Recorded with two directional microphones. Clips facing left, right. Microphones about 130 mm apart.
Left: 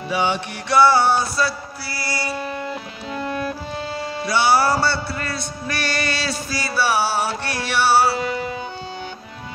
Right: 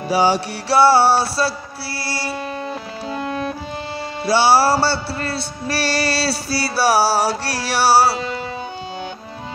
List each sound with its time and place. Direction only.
0.1 s music: 35° right (ahead or behind)
2.0 s mantra: 30° right (ahead or behind)
3.1 s music: 20° right (ahead or behind)